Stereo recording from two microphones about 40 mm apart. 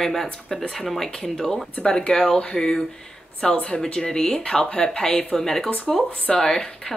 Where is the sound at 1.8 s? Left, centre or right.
Left.